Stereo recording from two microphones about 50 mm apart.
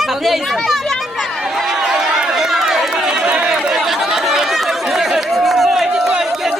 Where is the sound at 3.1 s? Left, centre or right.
Centre.